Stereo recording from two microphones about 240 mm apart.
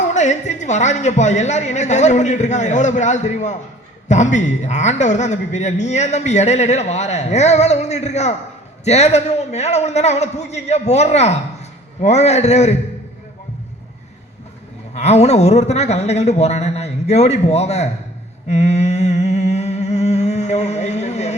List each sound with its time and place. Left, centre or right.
0.1 s a man's voice: left
14.9 s a man's voice: left
18.4 s humming: left